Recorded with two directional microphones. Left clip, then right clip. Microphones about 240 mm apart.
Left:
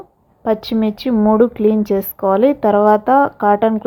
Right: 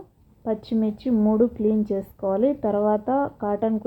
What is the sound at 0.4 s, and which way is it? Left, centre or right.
A woman's voice, left.